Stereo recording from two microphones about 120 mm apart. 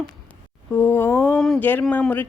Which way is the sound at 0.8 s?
20° left (ahead or behind).